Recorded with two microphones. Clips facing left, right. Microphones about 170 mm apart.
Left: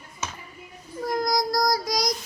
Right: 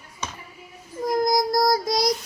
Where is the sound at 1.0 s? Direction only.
20° right (ahead or behind).